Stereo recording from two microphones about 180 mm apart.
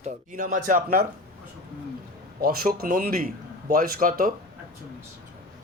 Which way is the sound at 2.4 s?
55° right (ahead or behind).